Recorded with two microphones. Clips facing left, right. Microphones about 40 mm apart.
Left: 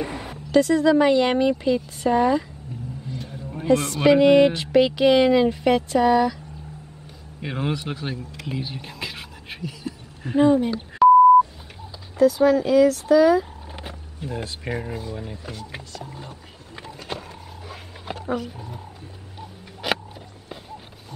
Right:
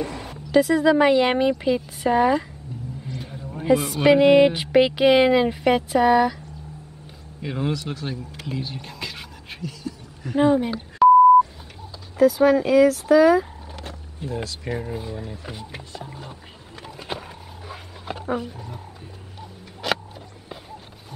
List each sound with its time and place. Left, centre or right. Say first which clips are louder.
0.0 s a sound: even; centre
0.5 s speech: even; centre
3.6 s speech: even; centre
7.4 s speech: even; left
8.5 s a sound: even; centre
10.2 s speech: left 2 dB; left
10.6 s speech: even; centre
12.2 s speech: right 1 dB; centre
14.3 s speech: even; centre
15.9 s speech: even; centre
17.1 s roaring cats: right 1 dB; centre
17.6 s dog: right 1 dB; centre
18.2 s speech: even; right
19.8 s a sound: even; centre